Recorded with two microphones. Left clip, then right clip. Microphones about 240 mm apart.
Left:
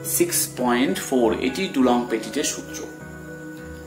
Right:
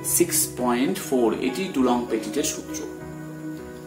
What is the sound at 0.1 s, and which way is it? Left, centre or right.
Speech, centre.